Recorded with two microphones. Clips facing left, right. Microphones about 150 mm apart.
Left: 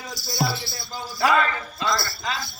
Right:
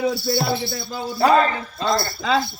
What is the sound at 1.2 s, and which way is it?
Speech, 30° right (ahead or behind).